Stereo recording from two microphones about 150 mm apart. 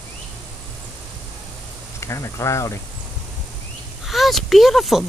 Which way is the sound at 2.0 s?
20° left (ahead or behind).